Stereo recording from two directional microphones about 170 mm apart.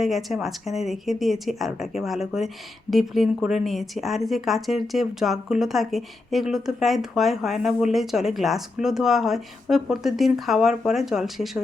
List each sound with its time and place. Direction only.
0.0 s a woman's voice: centre (ahead or behind)